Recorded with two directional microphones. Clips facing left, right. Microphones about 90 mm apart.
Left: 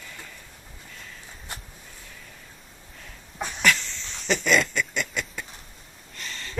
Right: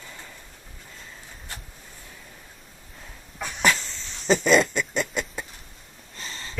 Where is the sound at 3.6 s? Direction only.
35° right (ahead or behind).